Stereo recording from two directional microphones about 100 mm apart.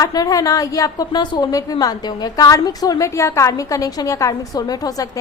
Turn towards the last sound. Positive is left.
turn(degrees=35)  # may be behind; listen again after turning